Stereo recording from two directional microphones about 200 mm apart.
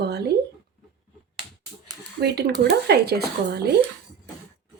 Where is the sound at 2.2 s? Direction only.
55° right (ahead or behind).